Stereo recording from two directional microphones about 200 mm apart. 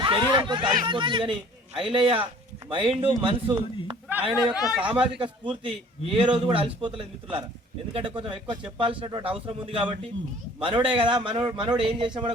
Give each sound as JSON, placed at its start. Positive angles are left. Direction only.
{"t": 0.0, "sound": "a man's voice", "side_deg": -25}
{"t": 4.1, "sound": "speech", "side_deg": -10}
{"t": 5.1, "sound": "a man's voice", "side_deg": -25}